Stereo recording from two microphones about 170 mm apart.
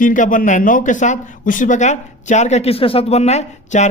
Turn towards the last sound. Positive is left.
turn(degrees=40)  # may be behind; listen again after turning